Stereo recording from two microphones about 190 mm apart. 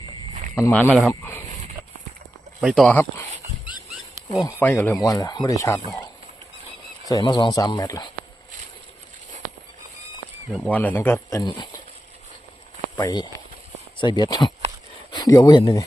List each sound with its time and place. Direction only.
0.5 s speech: 10° left (ahead or behind)
2.6 s speech: centre (ahead or behind)
4.4 s speech: 10° left (ahead or behind)
7.1 s speech: 20° left (ahead or behind)
10.5 s speech: 5° left (ahead or behind); by 11.7 s 25° left (ahead or behind)
13.0 s speech: 20° left (ahead or behind)